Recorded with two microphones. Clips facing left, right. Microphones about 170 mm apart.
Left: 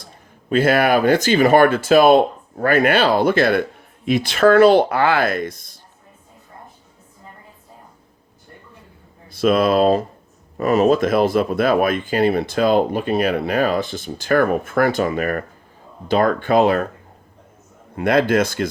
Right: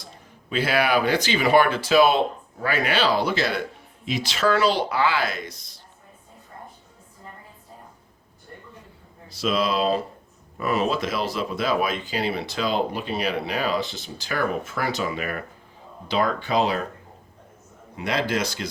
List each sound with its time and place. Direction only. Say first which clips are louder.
0.5 s speech: left 6 dB; 50° left (ahead or behind)
9.3 s speech: left 8 dB; 55° left (ahead or behind)
17.9 s speech: left 9 dB; 55° left (ahead or behind)